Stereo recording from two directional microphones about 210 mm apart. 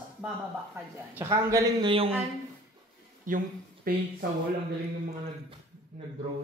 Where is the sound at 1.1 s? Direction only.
15° right (ahead or behind).